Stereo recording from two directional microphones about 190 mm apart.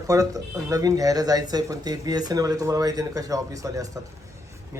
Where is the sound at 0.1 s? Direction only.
20° right (ahead or behind).